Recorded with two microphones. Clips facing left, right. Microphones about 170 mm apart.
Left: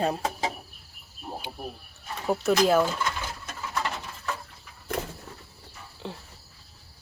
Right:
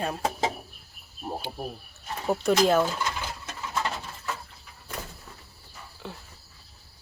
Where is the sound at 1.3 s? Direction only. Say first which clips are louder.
Right 3 dB; 40° right (ahead or behind).